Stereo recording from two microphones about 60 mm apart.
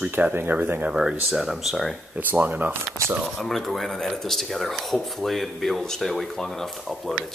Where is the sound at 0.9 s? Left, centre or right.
Centre.